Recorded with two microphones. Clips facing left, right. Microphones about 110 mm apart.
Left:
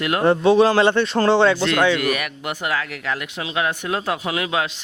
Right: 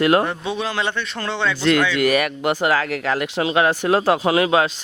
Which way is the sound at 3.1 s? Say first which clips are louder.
Right 8 dB; 90° right.